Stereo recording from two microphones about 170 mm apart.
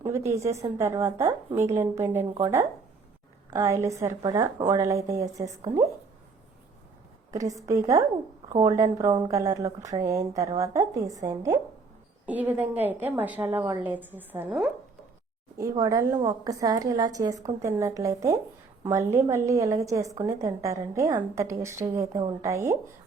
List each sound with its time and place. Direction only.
0.3 s a woman's voice: 15° right (ahead or behind)
3.5 s a woman's voice: 20° right (ahead or behind)
7.3 s a woman's voice: 20° right (ahead or behind)
12.2 s a woman's voice: 10° right (ahead or behind)
15.7 s a woman's voice: 20° right (ahead or behind)